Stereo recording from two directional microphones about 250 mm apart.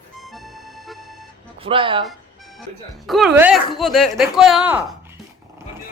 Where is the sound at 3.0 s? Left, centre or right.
Centre.